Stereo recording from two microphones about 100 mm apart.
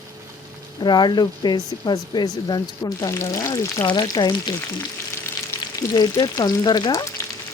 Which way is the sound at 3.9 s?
45° left (ahead or behind).